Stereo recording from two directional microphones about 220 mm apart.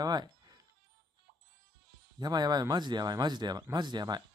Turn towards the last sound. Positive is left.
turn(degrees=-20)  # may be behind; listen again after turning